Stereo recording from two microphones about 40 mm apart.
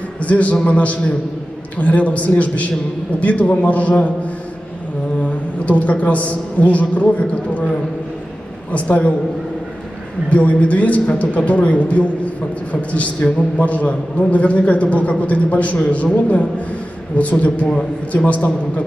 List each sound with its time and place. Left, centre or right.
0.2 s a man's voice: left
5.2 s a man's voice: left
8.7 s a man's voice: left
10.3 s a man's voice: left